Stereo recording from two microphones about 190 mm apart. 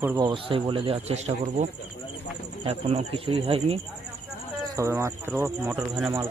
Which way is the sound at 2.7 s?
30° right (ahead or behind).